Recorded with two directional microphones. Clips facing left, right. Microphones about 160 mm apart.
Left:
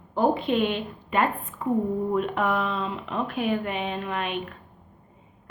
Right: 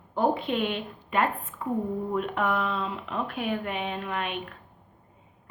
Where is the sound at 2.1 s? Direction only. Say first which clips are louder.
Even; 35° left (ahead or behind).